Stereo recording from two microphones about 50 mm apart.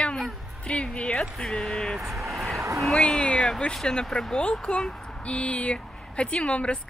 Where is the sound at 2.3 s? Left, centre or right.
Centre.